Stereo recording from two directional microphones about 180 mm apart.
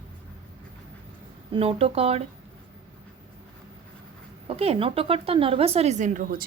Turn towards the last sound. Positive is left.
turn(degrees=-50)  # may be behind; listen again after turning